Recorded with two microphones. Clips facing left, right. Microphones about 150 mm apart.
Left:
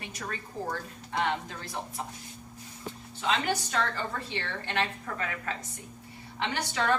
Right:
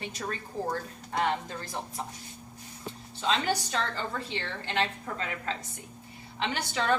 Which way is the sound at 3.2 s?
25° right (ahead or behind).